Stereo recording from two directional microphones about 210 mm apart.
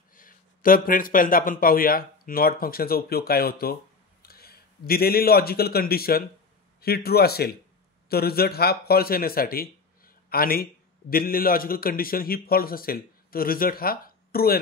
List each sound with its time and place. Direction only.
0.1 s a man's voice: 40° left (ahead or behind)